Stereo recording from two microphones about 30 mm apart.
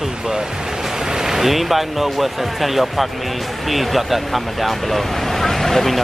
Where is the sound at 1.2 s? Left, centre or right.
Centre.